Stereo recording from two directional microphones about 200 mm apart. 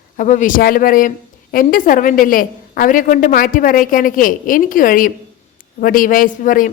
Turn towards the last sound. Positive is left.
turn(degrees=40)  # may be behind; listen again after turning